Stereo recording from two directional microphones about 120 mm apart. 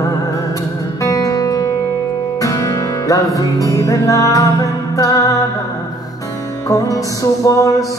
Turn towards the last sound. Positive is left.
turn(degrees=30)  # may be behind; listen again after turning